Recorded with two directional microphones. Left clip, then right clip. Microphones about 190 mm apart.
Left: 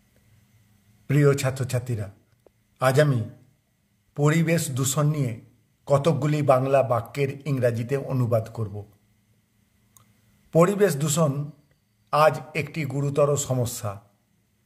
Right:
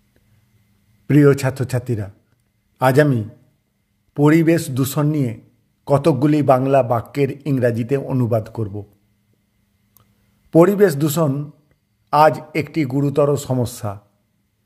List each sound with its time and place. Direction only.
1.0 s a man's voice: 35° right (ahead or behind)
10.5 s a man's voice: 35° right (ahead or behind)